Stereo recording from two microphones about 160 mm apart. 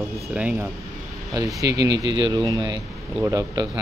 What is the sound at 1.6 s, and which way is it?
Speech, 25° right (ahead or behind).